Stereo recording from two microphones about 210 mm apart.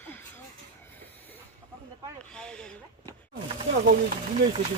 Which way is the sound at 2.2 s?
5° left (ahead or behind).